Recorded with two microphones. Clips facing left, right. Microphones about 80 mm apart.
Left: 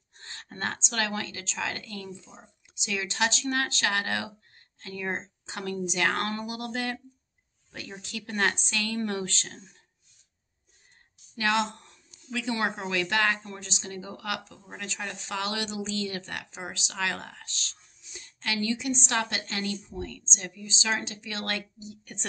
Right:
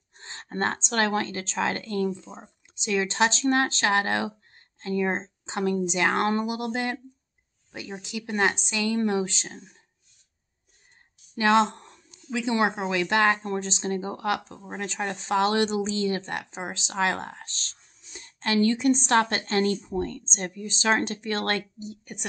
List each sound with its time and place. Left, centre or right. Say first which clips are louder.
0.2 s speech: right 6 dB; right
11.3 s speech: right 6 dB; right
12.3 s speech: right 5 dB; right